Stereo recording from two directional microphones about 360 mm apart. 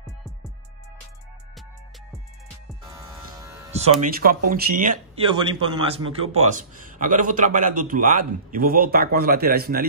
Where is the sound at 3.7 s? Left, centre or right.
Centre.